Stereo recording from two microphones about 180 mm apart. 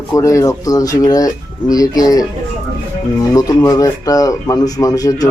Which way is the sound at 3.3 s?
20° left (ahead or behind).